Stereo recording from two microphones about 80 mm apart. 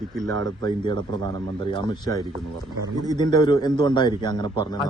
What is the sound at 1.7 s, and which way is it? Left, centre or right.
Speech, left.